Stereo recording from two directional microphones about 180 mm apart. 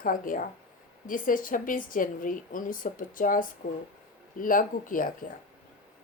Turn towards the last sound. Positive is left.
turn(degrees=50)  # may be behind; listen again after turning